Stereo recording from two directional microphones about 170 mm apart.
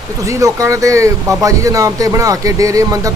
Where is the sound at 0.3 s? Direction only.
20° right (ahead or behind).